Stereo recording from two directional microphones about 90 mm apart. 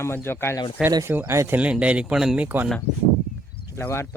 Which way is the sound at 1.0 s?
25° right (ahead or behind).